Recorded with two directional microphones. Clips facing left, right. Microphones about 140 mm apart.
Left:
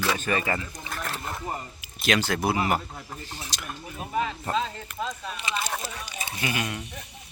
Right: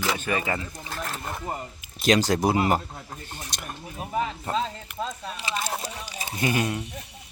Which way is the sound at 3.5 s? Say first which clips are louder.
Right 1 dB; 50° right (ahead or behind).